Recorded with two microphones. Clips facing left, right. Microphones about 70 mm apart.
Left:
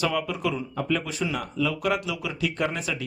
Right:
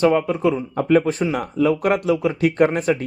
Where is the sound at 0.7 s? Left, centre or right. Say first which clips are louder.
Right 11 dB; right.